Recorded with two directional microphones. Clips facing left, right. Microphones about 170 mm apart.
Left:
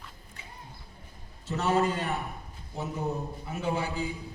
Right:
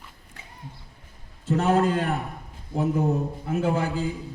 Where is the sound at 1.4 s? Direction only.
50° right (ahead or behind).